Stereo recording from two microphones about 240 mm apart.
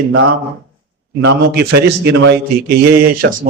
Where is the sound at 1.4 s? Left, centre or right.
Right.